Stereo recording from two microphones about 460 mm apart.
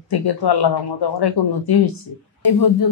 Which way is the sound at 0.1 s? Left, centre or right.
Left.